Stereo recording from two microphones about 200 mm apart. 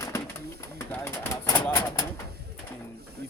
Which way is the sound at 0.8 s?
15° left (ahead or behind).